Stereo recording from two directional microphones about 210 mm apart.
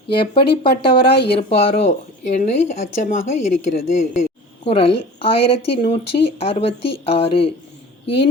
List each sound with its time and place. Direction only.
0.1 s a woman's voice: 25° left (ahead or behind)
1.1 s speech: 50° left (ahead or behind)
1.4 s a woman's voice: 30° left (ahead or behind)